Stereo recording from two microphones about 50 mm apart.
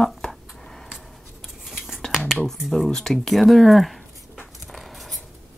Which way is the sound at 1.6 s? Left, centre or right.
Centre.